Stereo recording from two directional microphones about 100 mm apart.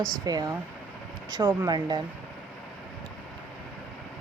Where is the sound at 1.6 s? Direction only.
40° right (ahead or behind).